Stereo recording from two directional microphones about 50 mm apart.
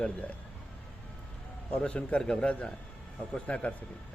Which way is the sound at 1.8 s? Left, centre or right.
Left.